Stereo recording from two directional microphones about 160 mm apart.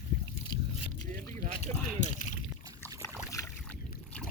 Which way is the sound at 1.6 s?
50° left (ahead or behind).